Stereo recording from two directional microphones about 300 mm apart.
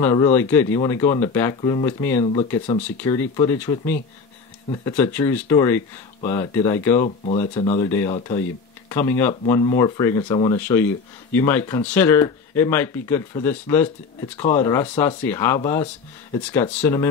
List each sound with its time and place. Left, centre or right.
0.0 s speech: centre
2.2 s speech: centre
2.8 s speech: centre
7.5 s speech: centre
8.8 s speech: centre